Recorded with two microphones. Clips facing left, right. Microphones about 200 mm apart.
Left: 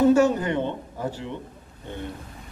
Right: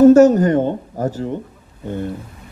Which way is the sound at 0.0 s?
40° right (ahead or behind).